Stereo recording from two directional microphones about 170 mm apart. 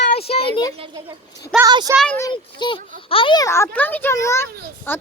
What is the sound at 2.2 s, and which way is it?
A child's voice, 25° left (ahead or behind).